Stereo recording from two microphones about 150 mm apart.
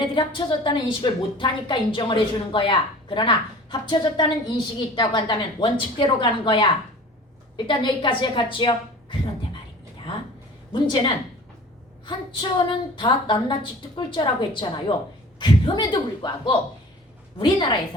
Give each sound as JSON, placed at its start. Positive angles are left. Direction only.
{"t": 0.0, "sound": "a woman's voice", "side_deg": 35}
{"t": 10.7, "sound": "a woman's voice", "side_deg": 30}